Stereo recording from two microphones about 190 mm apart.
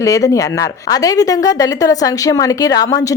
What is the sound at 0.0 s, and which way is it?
A woman's voice, 15° left (ahead or behind).